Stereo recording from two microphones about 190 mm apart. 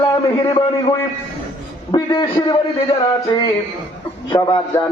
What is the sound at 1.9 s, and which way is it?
Speech, 20° left (ahead or behind).